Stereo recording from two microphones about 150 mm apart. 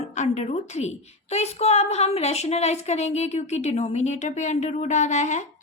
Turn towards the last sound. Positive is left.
turn(degrees=50)  # may be behind; listen again after turning